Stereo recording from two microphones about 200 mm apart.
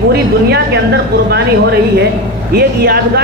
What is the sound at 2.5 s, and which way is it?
Speech, 55° right (ahead or behind).